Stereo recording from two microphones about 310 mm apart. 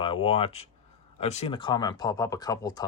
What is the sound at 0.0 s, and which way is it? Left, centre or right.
Speech, centre.